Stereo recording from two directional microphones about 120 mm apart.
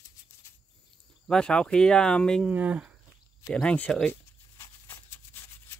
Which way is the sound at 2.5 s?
10° right (ahead or behind).